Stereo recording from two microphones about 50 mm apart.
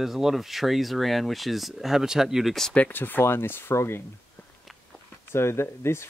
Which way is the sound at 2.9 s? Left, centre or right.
Left.